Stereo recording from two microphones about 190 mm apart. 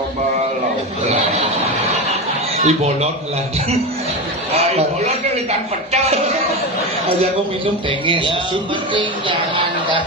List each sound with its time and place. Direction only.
1.1 s a sound: 35° right (ahead or behind)
2.6 s speech: 35° right (ahead or behind)
4.5 s a man's voice: 35° right (ahead or behind)
8.0 s a man's voice: 25° right (ahead or behind)